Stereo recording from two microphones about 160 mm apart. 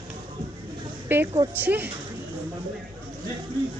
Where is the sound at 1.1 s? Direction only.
15° right (ahead or behind).